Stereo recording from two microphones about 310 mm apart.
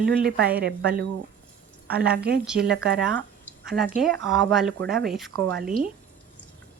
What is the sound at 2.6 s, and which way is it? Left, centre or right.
Speech, right.